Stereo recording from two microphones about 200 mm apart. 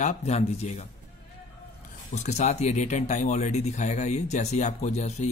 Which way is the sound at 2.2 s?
35° left (ahead or behind).